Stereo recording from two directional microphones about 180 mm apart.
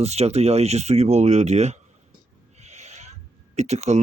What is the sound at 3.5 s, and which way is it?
Speech, 40° right (ahead or behind).